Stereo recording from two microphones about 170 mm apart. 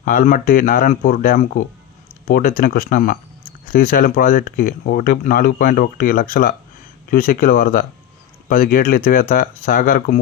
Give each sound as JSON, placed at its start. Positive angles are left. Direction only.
{"t": 0.0, "sound": "speech", "side_deg": 55}